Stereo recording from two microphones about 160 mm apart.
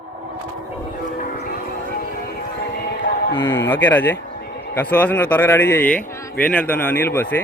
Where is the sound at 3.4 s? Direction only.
10° left (ahead or behind).